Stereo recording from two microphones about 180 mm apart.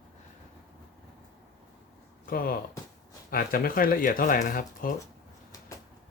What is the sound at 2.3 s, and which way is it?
Speech, 55° left (ahead or behind).